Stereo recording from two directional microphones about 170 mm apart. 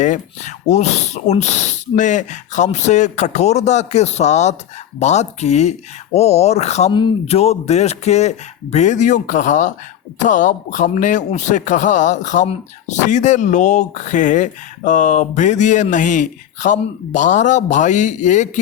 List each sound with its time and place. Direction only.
0.0 s speech: 45° left (ahead or behind)